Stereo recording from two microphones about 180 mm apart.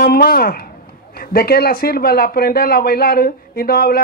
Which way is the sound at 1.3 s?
60° left (ahead or behind).